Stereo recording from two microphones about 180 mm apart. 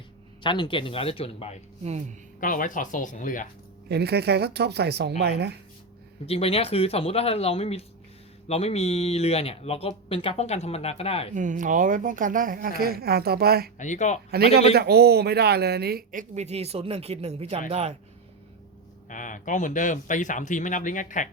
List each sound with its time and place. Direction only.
0.4 s speech: 25° left (ahead or behind)
1.8 s speech: 40° right (ahead or behind)
2.4 s speech: 50° left (ahead or behind)
3.8 s speech: 65° right (ahead or behind)
6.2 s speech: 35° left (ahead or behind)
11.3 s speech: 45° right (ahead or behind)
13.7 s speech: 45° left (ahead or behind)
14.3 s speech: 60° right (ahead or behind)
16.3 s speech: 35° right (ahead or behind)
19.0 s speech: 45° left (ahead or behind)